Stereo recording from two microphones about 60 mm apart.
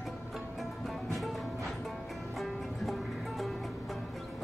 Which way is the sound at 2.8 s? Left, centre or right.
Centre.